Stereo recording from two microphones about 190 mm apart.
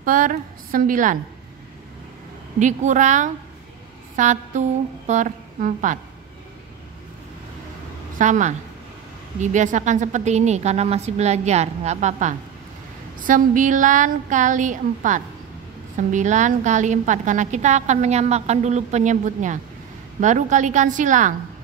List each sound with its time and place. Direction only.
0.0 s a woman's voice: 45° right (ahead or behind)
2.6 s a woman's voice: 40° right (ahead or behind)
8.2 s a woman's voice: 40° right (ahead or behind)